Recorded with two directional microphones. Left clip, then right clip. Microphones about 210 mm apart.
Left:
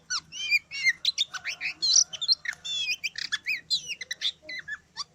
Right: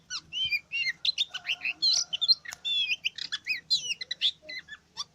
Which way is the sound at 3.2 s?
15° left (ahead or behind).